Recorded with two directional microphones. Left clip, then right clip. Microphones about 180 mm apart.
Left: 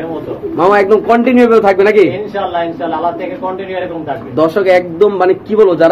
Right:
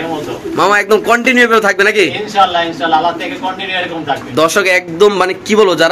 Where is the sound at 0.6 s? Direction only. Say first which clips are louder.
Left 1 dB; 20° right (ahead or behind).